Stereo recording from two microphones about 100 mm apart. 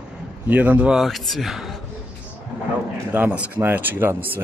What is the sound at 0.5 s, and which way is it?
Speech, 15° right (ahead or behind).